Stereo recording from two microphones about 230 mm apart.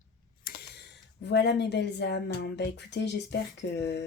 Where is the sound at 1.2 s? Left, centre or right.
Left.